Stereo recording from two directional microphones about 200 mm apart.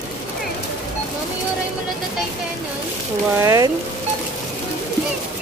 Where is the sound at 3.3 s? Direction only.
15° right (ahead or behind).